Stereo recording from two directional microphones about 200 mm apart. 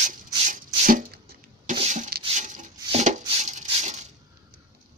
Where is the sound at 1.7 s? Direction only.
35° right (ahead or behind).